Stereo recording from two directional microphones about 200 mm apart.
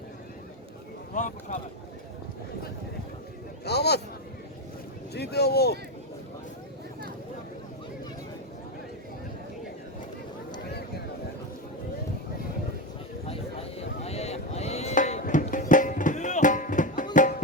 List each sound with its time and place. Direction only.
1.1 s speech: 40° left (ahead or behind)
3.6 s a man's voice: 55° left (ahead or behind)
5.1 s speech: 55° left (ahead or behind)
10.7 s a sound: 55° left (ahead or behind)
13.2 s a sound: 30° left (ahead or behind)
15.7 s music: 40° left (ahead or behind)